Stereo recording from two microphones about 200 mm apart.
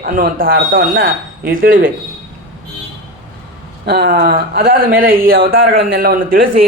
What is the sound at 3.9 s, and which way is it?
Speech, 50° right (ahead or behind).